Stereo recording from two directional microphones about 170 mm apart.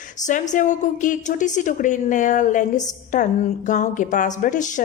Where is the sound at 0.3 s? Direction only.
50° left (ahead or behind).